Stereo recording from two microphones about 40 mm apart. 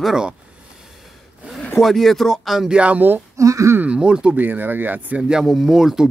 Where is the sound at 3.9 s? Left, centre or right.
Right.